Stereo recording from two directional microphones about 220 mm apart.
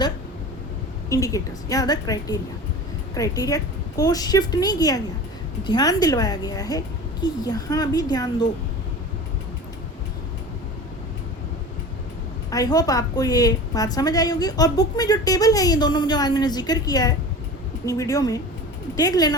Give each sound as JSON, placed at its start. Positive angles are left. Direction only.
{"t": 1.1, "sound": "a woman's voice", "side_deg": 15}
{"t": 12.5, "sound": "a woman's voice", "side_deg": 15}